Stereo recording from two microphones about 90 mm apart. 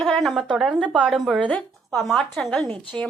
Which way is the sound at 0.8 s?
10° left (ahead or behind).